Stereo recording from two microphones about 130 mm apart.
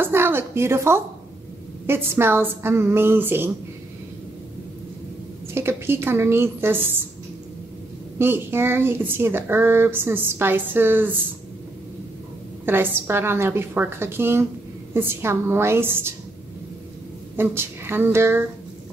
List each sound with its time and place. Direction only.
0.0 s a woman's voice: 20° right (ahead or behind)
5.5 s speech: 20° right (ahead or behind)
8.2 s speech: 15° right (ahead or behind)
12.6 s a woman's voice: 15° right (ahead or behind)
17.4 s speech: 15° right (ahead or behind)